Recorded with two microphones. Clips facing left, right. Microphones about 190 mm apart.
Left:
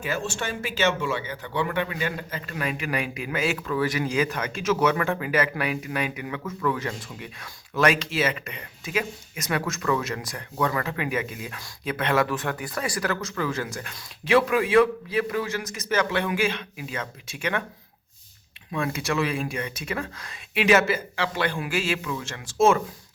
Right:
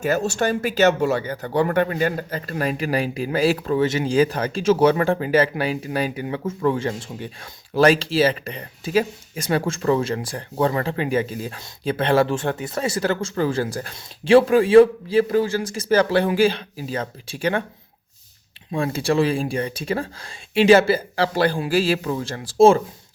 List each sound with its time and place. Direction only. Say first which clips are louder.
0.0 s speech: right 8 dB; 40° right (ahead or behind)
18.7 s speech: right 6 dB; 30° right (ahead or behind)